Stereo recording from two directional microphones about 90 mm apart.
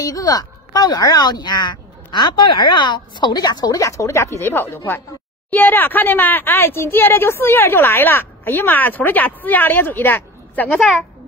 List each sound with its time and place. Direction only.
0.0 s speech: 45° left (ahead or behind); by 10.8 s 20° left (ahead or behind)